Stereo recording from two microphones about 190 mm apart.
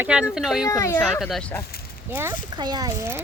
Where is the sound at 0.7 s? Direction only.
15° left (ahead or behind).